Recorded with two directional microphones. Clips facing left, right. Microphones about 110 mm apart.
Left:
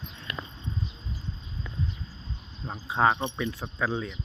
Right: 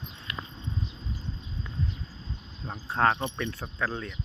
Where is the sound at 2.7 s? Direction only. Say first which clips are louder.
Left 1 dB; 5° left (ahead or behind).